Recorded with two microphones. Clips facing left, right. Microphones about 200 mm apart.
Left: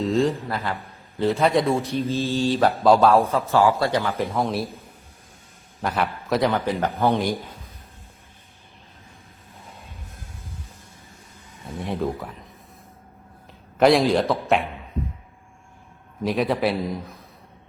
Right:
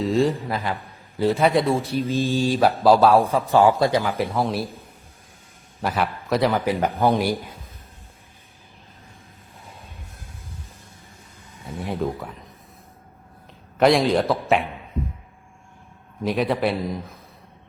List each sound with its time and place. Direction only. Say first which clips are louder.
0.0 s a man's voice: right 1 dB; centre (ahead or behind)
0.4 s speech: right 1 dB; 15° right (ahead or behind)
1.1 s a man's voice: right 1 dB; centre (ahead or behind)
2.0 s a man's voice: right 2 dB; 15° right (ahead or behind)
3.2 s speech: right 2 dB; 15° right (ahead or behind)
4.4 s a man's voice: right 1 dB; centre (ahead or behind)
5.8 s a man's voice: right 1 dB; centre (ahead or behind)
6.7 s speech: right 1 dB; 15° right (ahead or behind)
11.6 s a man's voice: even; centre (ahead or behind)
13.7 s a man's voice: even; centre (ahead or behind)
16.2 s a man's voice: even; centre (ahead or behind)